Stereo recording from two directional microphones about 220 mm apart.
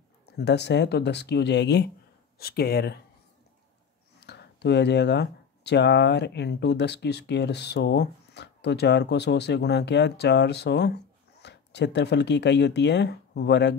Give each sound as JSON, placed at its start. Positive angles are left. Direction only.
{"t": 0.4, "sound": "speech", "side_deg": 50}
{"t": 4.2, "sound": "speech", "side_deg": 50}